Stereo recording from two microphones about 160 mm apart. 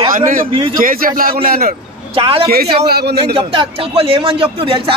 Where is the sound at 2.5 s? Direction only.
80° right.